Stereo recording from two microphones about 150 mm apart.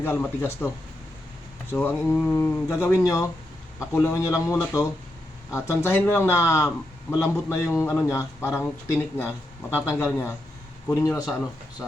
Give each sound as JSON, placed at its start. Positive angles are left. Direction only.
{"t": 0.0, "sound": "speech", "side_deg": 15}
{"t": 1.7, "sound": "a man's voice", "side_deg": 15}